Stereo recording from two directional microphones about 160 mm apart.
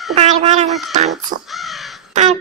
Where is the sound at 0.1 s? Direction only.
40° right (ahead or behind).